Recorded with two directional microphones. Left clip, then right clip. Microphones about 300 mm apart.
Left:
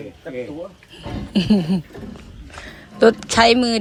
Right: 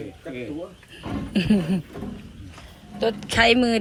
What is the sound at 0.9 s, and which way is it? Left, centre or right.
Speech, centre.